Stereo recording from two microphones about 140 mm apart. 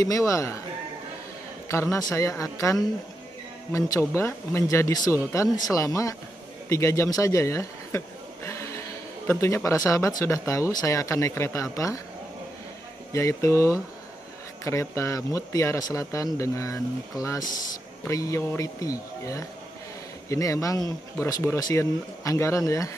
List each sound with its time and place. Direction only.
0.0 s speech: 25° left (ahead or behind)
1.7 s a man's voice: 20° left (ahead or behind)
8.5 s a sound: 20° left (ahead or behind)
9.3 s speech: 20° left (ahead or behind)
13.1 s speech: 20° left (ahead or behind)